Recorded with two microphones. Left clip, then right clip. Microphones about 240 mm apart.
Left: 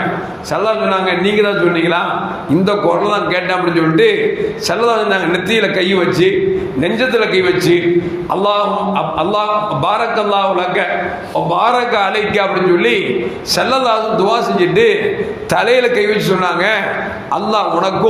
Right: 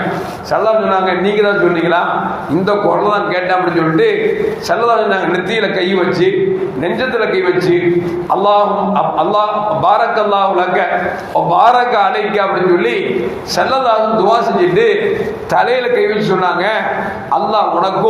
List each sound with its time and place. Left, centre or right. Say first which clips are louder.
0.5 s a man's voice: right 2 dB; left
8.3 s a man's voice: right 3 dB; left